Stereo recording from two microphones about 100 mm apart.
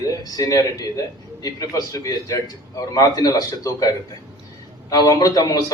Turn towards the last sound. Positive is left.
turn(degrees=35)  # may be behind; listen again after turning